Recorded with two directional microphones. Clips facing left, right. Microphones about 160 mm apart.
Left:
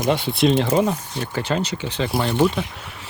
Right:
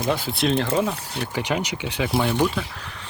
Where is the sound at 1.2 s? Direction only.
15° right (ahead or behind).